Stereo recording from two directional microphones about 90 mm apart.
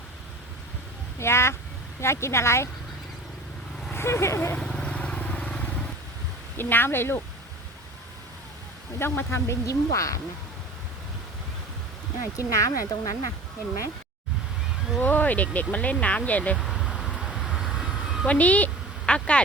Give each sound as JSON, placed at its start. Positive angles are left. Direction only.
{"t": 1.2, "sound": "speech", "side_deg": 30}
{"t": 3.9, "sound": "speech", "side_deg": 30}
{"t": 4.5, "sound": "vehicle", "side_deg": 10}
{"t": 6.6, "sound": "speech", "side_deg": 25}
{"t": 9.0, "sound": "speech", "side_deg": 25}
{"t": 12.4, "sound": "speech", "side_deg": 40}
{"t": 15.0, "sound": "speech", "side_deg": 20}
{"t": 16.6, "sound": "vehicle", "side_deg": 0}
{"t": 18.3, "sound": "a woman's voice", "side_deg": 15}